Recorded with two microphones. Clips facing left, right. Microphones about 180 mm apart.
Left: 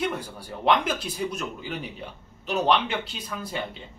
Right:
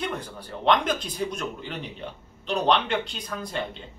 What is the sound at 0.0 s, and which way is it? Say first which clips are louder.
A man's voice: left 2 dB; 10° left (ahead or behind).